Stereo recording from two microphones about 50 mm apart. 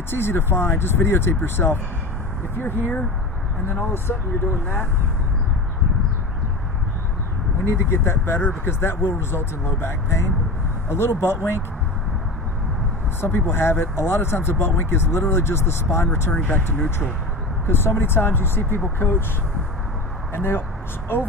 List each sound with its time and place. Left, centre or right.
0.1 s speech: left
7.6 s speech: left
13.2 s speech: left
16.5 s speech: left
17.6 s speech: left
20.3 s speech: left